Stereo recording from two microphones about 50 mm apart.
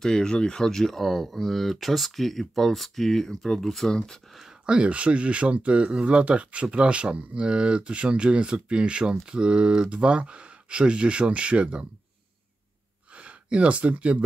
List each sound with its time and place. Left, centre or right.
0.0 s speech: centre
4.6 s speech: right
13.1 s speech: right